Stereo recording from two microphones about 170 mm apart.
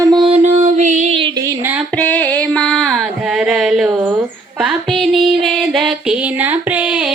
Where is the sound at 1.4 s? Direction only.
15° right (ahead or behind).